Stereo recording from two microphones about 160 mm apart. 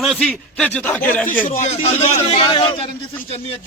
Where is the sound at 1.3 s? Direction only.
55° left (ahead or behind).